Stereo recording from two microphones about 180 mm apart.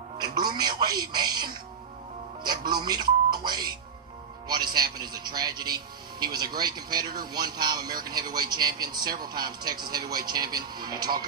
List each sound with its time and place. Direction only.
0.2 s speech: 25° right (ahead or behind)
2.7 s speech: 25° right (ahead or behind)